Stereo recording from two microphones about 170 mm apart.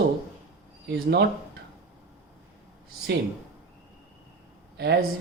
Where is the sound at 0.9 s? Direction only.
75° right (ahead or behind).